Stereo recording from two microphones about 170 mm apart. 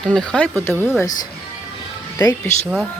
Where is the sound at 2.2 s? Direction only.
20° left (ahead or behind).